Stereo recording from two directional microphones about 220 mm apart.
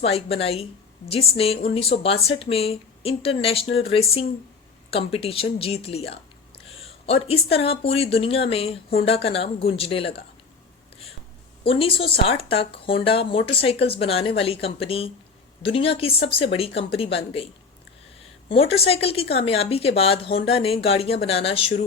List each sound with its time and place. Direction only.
0.0 s speech: 25° left (ahead or behind)
7.3 s speech: 25° left (ahead or behind)
11.6 s speech: 25° left (ahead or behind)